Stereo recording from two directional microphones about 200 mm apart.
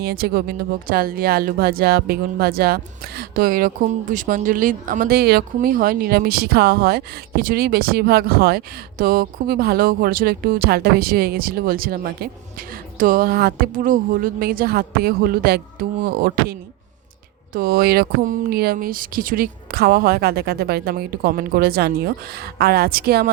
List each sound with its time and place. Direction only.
0.0 s speech: 50° right (ahead or behind)